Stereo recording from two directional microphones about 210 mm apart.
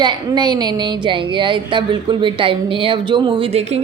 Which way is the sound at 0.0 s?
20° right (ahead or behind).